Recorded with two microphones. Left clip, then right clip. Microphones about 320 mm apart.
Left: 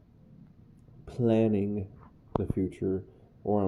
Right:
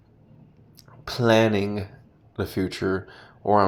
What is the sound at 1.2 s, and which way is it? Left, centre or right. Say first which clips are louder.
Speech: right 7 dB; right.